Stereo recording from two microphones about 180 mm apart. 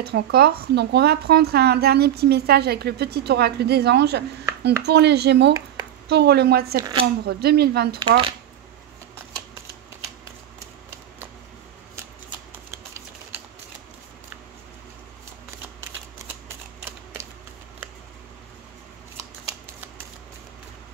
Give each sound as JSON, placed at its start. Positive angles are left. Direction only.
{"t": 0.0, "sound": "speech", "side_deg": -60}
{"t": 6.8, "sound": "speech", "side_deg": -25}
{"t": 7.2, "sound": "speech", "side_deg": -60}